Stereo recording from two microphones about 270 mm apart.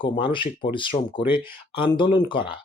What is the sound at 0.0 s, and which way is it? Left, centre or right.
Speech, centre.